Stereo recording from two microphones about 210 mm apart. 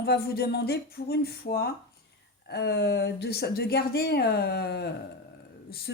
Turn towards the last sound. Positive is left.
turn(degrees=55)  # may be behind; listen again after turning